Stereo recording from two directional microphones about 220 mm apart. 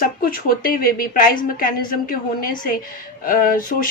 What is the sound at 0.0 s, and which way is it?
Speech, 40° left (ahead or behind).